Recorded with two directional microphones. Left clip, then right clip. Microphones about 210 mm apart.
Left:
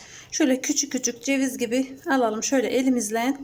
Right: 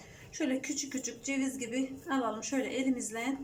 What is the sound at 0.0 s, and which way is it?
A woman's voice, 45° left (ahead or behind).